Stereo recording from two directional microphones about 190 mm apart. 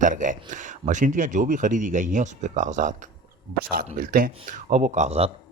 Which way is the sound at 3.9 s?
45° right (ahead or behind).